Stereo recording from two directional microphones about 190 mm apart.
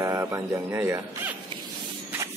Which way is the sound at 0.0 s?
15° right (ahead or behind).